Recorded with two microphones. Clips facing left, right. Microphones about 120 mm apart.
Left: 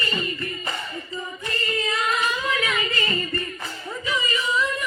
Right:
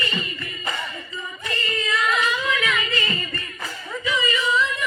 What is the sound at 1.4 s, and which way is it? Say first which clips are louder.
Yodeling: even; 40° left (ahead or behind).